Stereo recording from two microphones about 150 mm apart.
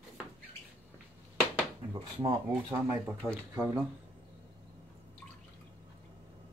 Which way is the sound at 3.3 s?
15° right (ahead or behind).